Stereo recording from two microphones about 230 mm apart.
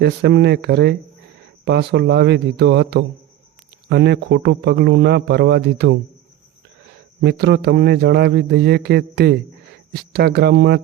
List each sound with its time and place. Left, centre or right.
0.0 s a man's voice: right
7.2 s a man's voice: right